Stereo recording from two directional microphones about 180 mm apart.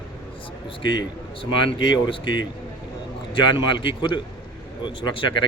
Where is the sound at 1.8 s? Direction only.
25° left (ahead or behind).